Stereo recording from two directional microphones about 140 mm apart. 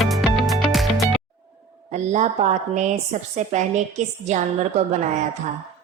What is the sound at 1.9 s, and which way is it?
A woman's voice, 55° right (ahead or behind).